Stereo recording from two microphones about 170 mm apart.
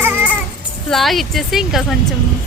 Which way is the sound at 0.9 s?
Centre (ahead or behind).